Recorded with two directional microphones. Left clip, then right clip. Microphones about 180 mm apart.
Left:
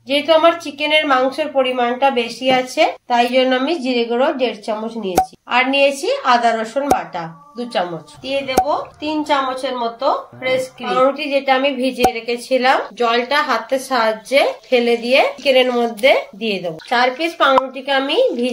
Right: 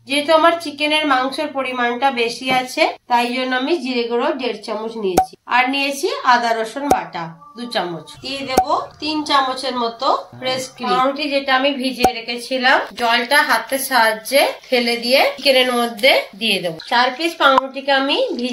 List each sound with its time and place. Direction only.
0.1 s a woman's voice: 50° left (ahead or behind)
8.6 s a woman's voice: 30° left (ahead or behind)
16.9 s a woman's voice: 35° left (ahead or behind)